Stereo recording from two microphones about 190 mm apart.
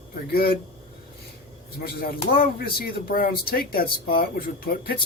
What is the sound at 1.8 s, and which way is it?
Speech, 50° left (ahead or behind).